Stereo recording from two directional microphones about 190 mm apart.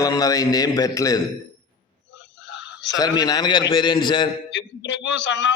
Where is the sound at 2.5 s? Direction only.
70° left (ahead or behind).